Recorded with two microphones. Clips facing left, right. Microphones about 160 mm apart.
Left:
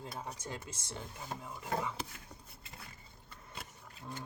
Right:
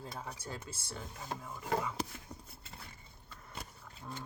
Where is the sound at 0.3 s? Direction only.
20° left (ahead or behind).